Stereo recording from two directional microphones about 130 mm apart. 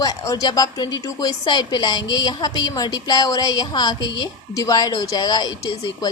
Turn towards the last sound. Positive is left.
turn(degrees=30)  # may be behind; listen again after turning